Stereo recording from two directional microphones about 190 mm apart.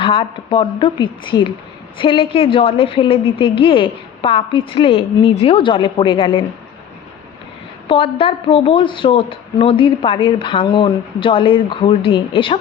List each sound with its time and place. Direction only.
0.0 s a woman's voice: 30° left (ahead or behind)
7.9 s a woman's voice: 30° left (ahead or behind)